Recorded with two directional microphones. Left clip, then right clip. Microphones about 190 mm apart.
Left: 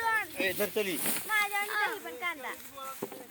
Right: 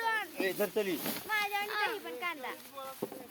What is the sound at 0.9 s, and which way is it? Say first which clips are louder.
Speech: left 3 dB; 30° left (ahead or behind).